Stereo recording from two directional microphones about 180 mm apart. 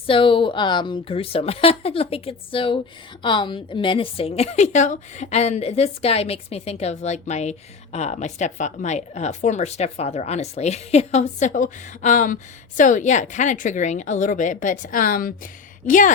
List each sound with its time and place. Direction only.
0.1 s a woman's voice: 30° left (ahead or behind); by 16.1 s 45° left (ahead or behind)